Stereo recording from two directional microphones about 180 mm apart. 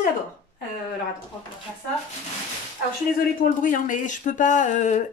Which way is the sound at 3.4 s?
50° left (ahead or behind).